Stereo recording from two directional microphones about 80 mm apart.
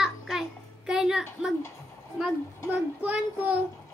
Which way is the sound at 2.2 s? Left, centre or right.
Centre.